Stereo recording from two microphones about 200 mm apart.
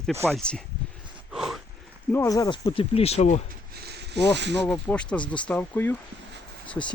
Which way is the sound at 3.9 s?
60° right (ahead or behind).